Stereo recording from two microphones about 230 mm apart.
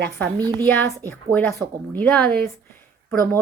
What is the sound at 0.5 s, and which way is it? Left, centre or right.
A woman's voice, centre.